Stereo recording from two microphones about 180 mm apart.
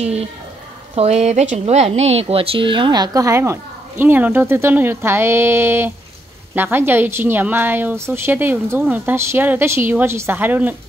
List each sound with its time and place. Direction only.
0.0 s a woman's voice: 35° right (ahead or behind); by 10.8 s 10° right (ahead or behind)